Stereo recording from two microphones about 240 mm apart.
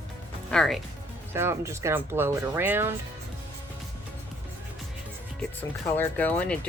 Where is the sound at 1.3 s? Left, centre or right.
Centre.